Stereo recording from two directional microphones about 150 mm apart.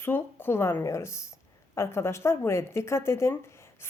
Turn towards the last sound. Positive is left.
turn(degrees=15)  # may be behind; listen again after turning